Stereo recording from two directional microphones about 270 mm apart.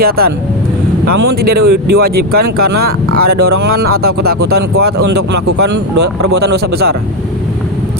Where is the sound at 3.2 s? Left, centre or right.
Right.